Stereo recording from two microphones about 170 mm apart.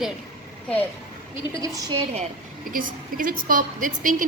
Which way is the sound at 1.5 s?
20° right (ahead or behind).